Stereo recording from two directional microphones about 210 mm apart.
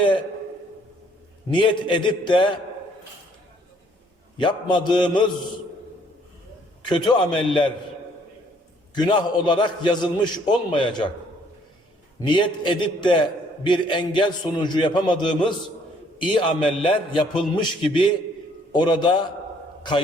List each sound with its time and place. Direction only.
1.5 s a man's voice: 25° left (ahead or behind)
4.4 s a man's voice: 20° left (ahead or behind)
6.8 s a man's voice: 20° left (ahead or behind)
9.0 s a man's voice: 20° left (ahead or behind)
12.2 s a man's voice: 20° left (ahead or behind)